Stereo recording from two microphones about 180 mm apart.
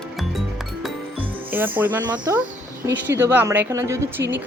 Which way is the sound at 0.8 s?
10° right (ahead or behind).